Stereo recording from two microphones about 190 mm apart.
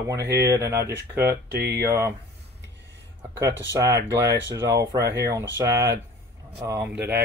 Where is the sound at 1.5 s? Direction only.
60° right (ahead or behind).